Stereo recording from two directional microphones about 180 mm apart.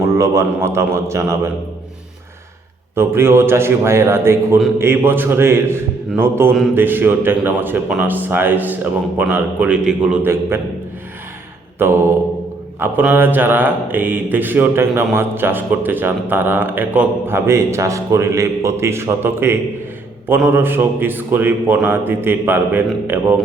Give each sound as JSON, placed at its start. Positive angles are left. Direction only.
{"t": 0.0, "sound": "speech", "side_deg": -15}
{"t": 2.9, "sound": "speech", "side_deg": -15}
{"t": 11.8, "sound": "speech", "side_deg": -15}